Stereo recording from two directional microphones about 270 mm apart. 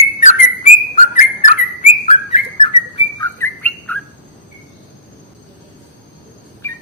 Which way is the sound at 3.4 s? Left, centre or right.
Centre.